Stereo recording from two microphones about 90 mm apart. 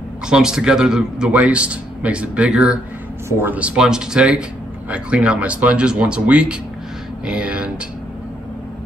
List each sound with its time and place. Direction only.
0.3 s a man's voice: 10° right (ahead or behind)
3.3 s speech: 30° right (ahead or behind)
3.5 s a man's voice: 10° right (ahead or behind)